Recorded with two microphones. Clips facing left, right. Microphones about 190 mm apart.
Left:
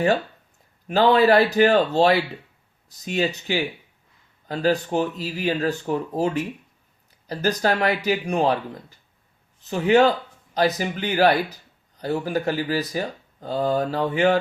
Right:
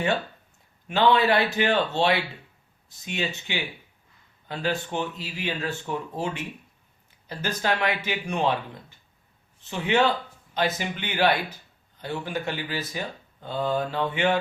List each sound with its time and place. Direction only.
0.9 s speech: 40° left (ahead or behind)